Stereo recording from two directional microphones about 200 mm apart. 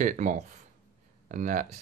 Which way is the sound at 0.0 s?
40° right (ahead or behind).